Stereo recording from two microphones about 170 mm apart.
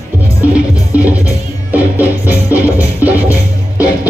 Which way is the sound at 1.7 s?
10° right (ahead or behind).